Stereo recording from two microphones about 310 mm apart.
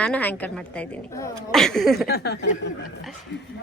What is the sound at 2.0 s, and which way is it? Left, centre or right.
Speech, left.